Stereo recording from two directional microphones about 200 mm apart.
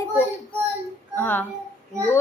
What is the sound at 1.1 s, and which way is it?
Speech, 10° left (ahead or behind).